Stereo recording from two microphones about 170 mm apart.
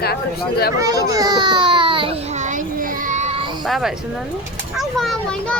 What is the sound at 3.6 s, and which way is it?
A child's voice, centre (ahead or behind).